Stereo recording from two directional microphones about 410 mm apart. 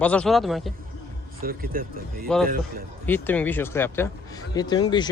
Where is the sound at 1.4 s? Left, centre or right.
Right.